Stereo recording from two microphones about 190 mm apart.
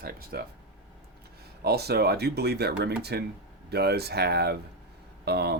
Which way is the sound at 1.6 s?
55° right (ahead or behind).